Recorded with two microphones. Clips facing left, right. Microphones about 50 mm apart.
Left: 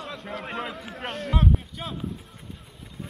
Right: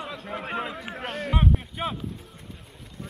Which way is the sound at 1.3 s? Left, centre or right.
Centre.